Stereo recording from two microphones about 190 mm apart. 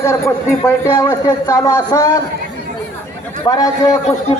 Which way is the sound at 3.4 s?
20° left (ahead or behind).